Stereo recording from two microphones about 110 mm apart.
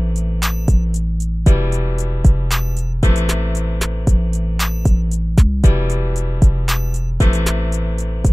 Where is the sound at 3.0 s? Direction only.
30° left (ahead or behind).